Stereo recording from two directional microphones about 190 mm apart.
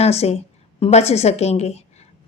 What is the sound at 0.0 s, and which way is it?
A woman's voice, 35° left (ahead or behind).